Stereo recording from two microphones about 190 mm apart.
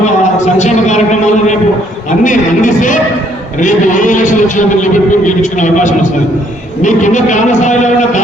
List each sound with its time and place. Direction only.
0.0 s a man's voice: 40° left (ahead or behind)